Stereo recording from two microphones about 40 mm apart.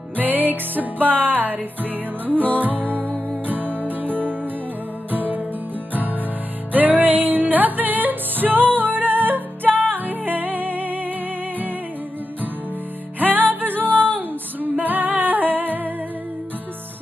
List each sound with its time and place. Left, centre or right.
0.1 s music: right
6.7 s music: right
13.2 s music: right